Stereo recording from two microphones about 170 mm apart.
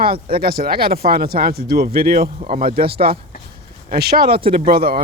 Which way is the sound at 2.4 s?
40° right (ahead or behind).